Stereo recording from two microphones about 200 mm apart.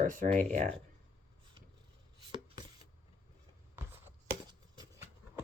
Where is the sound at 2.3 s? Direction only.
25° right (ahead or behind).